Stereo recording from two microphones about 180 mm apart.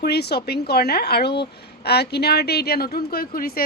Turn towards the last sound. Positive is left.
turn(degrees=55)  # may be behind; listen again after turning